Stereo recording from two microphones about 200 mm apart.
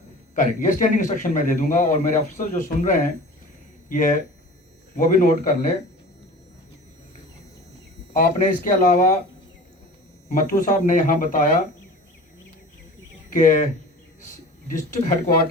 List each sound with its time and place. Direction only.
0.3 s a man's voice: 40° left (ahead or behind)
8.2 s a man's voice: 40° left (ahead or behind)
10.2 s a man's voice: 40° left (ahead or behind)
13.3 s a man's voice: 40° left (ahead or behind)
14.7 s a man's voice: 40° left (ahead or behind)